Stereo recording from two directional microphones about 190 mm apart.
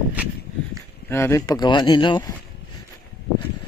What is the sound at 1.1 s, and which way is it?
Speech, 15° left (ahead or behind).